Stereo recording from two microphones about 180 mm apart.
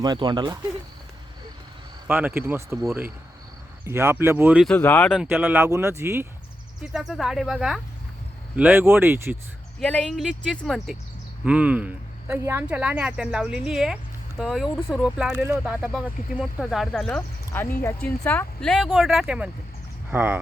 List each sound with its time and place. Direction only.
0.0 s speech: 25° right (ahead or behind)
2.0 s a woman's voice: 10° right (ahead or behind)
4.6 s speech: 10° left (ahead or behind)
5.1 s a woman's voice: 10° right (ahead or behind)
6.8 s a woman's voice: centre (ahead or behind)
9.8 s a woman's voice: 5° left (ahead or behind); by 20.4 s 10° right (ahead or behind)